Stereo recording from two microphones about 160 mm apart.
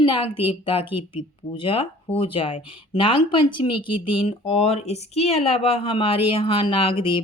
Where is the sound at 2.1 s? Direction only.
35° left (ahead or behind).